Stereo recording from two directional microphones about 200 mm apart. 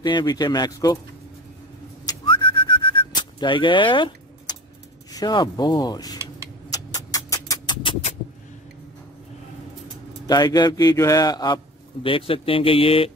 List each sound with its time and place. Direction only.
0.0 s a man's voice: 20° left (ahead or behind)
2.0 s whistling: 25° left (ahead or behind)
5.1 s a man's voice: 20° left (ahead or behind)
6.7 s a sound: 15° left (ahead or behind)
10.2 s a man's voice: 20° left (ahead or behind)